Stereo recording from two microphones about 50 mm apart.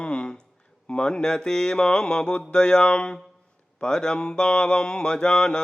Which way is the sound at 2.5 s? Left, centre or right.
Centre.